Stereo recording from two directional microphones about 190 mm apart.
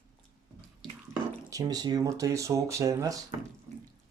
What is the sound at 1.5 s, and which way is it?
Speech, 20° right (ahead or behind).